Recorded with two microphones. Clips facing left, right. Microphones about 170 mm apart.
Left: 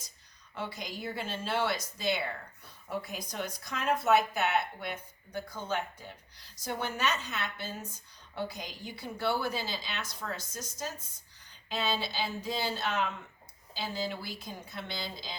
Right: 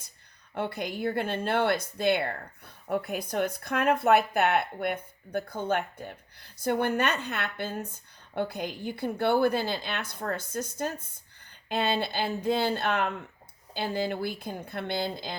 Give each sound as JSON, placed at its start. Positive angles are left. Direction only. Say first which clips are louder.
{"t": 0.5, "sound": "speech", "louder": "right 7 dB", "side_deg": -55}